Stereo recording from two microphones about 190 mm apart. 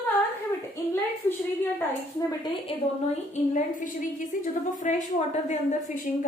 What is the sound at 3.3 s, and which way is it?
A woman's voice, 45° left (ahead or behind).